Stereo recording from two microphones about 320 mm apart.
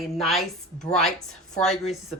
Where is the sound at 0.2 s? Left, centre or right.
Centre.